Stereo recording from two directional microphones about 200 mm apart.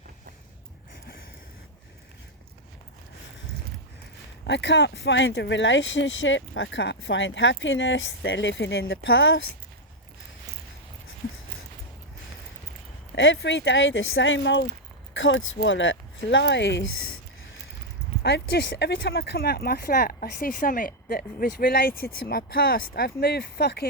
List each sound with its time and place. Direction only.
4.4 s speech: 60° left (ahead or behind)
9.1 s speech: 75° left (ahead or behind)
13.1 s speech: 65° left (ahead or behind)
15.1 s speech: 75° left (ahead or behind)
18.2 s speech: 55° left (ahead or behind)